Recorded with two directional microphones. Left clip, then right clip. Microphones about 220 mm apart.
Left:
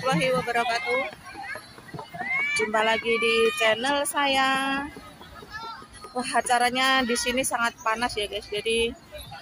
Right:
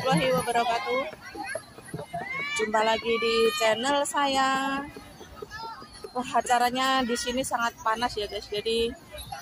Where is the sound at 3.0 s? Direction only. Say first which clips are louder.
Left 2 dB; 45° right (ahead or behind).